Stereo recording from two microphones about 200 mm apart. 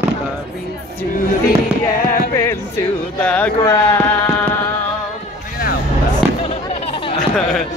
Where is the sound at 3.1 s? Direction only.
5° left (ahead or behind).